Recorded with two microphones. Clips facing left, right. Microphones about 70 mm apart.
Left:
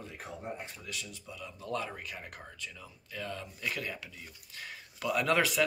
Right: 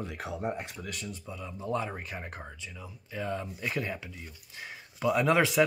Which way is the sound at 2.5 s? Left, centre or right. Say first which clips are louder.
Right 2 dB; centre.